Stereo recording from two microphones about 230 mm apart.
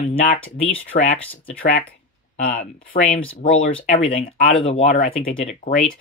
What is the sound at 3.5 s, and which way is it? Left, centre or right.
Speech, left.